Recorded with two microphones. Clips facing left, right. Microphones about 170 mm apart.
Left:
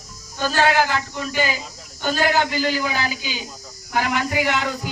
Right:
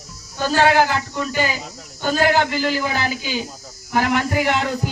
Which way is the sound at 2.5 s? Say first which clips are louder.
Right 1 dB; 55° right (ahead or behind).